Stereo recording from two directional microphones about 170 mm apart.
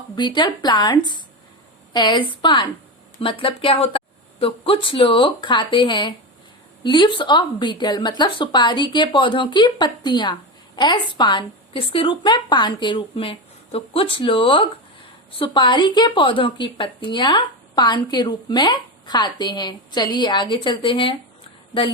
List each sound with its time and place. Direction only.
0.2 s a woman's voice: 25° left (ahead or behind)